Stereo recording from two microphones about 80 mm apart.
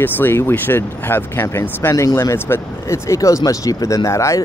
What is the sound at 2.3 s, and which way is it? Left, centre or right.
Speech, left.